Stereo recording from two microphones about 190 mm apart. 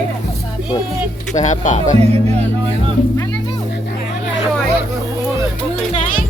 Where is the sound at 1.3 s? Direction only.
40° left (ahead or behind).